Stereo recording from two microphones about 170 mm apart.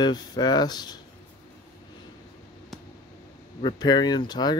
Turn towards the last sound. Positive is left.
turn(degrees=25)  # may be behind; listen again after turning